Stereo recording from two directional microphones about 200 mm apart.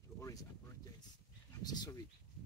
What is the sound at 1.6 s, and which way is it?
Speech, 20° left (ahead or behind).